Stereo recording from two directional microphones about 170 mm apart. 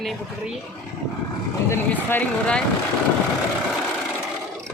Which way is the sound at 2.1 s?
5° left (ahead or behind).